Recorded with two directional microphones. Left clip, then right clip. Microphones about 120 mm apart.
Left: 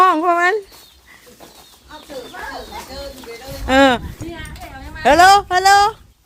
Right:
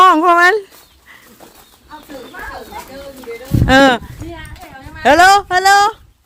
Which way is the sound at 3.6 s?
45° right (ahead or behind).